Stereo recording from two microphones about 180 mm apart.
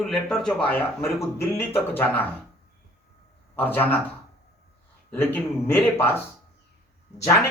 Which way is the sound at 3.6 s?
10° left (ahead or behind).